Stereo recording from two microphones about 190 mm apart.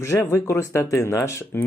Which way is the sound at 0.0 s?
15° left (ahead or behind).